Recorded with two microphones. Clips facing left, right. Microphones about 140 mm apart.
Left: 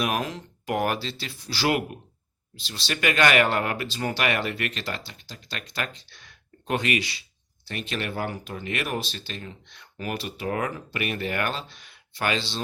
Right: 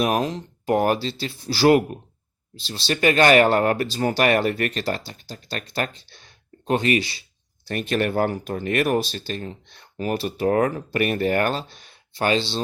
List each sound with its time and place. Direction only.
0.0 s speech: 35° right (ahead or behind)
7.7 s speech: 45° right (ahead or behind); by 12.6 s 30° right (ahead or behind)